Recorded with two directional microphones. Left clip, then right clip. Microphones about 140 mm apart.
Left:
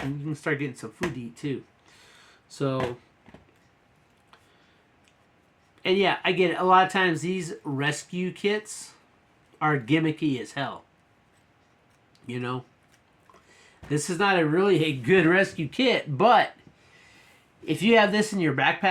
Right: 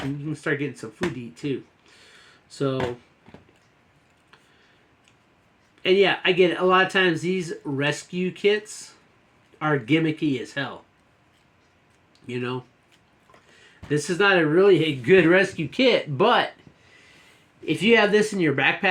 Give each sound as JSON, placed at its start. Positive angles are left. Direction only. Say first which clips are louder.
{"t": 0.4, "sound": "speech", "louder": "right 2 dB", "side_deg": 30}
{"t": 2.5, "sound": "speech", "louder": "right 3 dB", "side_deg": 30}
{"t": 5.8, "sound": "speech", "louder": "right 4 dB", "side_deg": 30}
{"t": 12.2, "sound": "speech", "louder": "right 3 dB", "side_deg": 30}
{"t": 13.9, "sound": "speech", "louder": "right 4 dB", "side_deg": 35}
{"t": 17.7, "sound": "speech", "louder": "right 2 dB", "side_deg": 25}